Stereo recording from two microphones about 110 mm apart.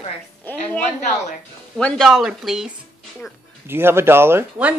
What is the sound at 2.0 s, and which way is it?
Speech, 5° right (ahead or behind).